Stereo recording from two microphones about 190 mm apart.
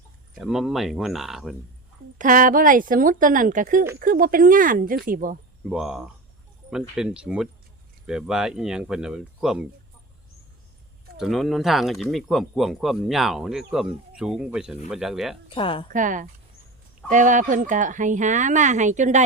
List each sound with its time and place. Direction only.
0.3 s speech: centre (ahead or behind)
2.1 s speech: 45° right (ahead or behind)
5.6 s speech: 5° right (ahead or behind)
11.2 s speech: centre (ahead or behind)
15.4 s a woman's voice: 25° left (ahead or behind)
15.9 s speech: 45° right (ahead or behind)